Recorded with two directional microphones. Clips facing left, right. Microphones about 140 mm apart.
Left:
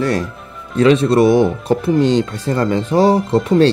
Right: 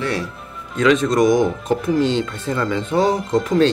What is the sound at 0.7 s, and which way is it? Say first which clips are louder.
Speech: left 4 dB; 35° left (ahead or behind).